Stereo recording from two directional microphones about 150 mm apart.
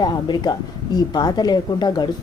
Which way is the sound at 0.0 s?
30° left (ahead or behind).